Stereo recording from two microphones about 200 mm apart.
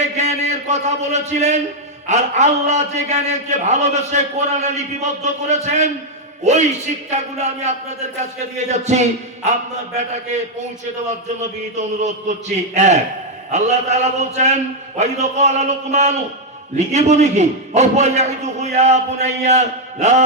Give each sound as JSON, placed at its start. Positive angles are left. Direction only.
{"t": 0.0, "sound": "a sound", "side_deg": -35}
{"t": 2.0, "sound": "a man's voice", "side_deg": -35}
{"t": 11.8, "sound": "a man's voice", "side_deg": -35}